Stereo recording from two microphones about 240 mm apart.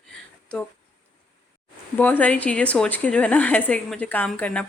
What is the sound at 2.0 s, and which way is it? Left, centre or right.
A woman's voice, centre.